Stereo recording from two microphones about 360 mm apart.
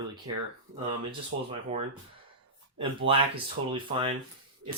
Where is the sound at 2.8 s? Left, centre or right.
Centre.